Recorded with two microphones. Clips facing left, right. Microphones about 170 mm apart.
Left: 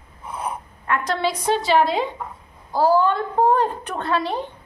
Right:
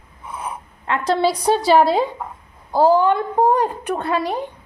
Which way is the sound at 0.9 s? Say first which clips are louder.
Right 4 dB; 30° right (ahead or behind).